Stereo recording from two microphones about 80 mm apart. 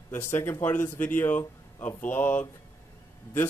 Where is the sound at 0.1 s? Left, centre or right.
Left.